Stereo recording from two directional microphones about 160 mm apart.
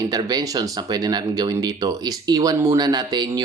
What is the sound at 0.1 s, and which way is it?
Speech, 25° right (ahead or behind).